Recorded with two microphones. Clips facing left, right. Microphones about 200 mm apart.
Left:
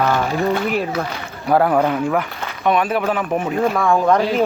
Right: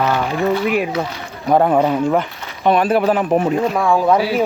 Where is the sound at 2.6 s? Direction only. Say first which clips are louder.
Right 4 dB; 30° right (ahead or behind).